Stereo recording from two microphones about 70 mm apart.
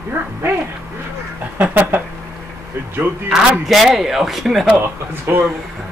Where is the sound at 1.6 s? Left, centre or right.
Right.